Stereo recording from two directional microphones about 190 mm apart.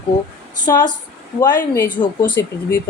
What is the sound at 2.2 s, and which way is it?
Speech, 15° left (ahead or behind).